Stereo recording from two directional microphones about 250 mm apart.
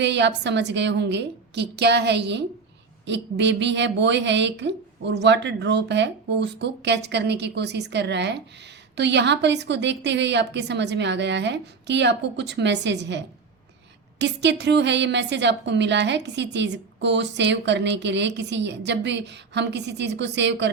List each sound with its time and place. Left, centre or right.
0.0 s a woman's voice: right